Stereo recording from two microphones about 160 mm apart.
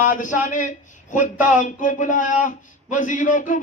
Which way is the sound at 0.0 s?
55° left (ahead or behind).